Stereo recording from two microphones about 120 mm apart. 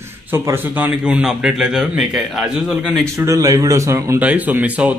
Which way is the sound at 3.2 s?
30° right (ahead or behind).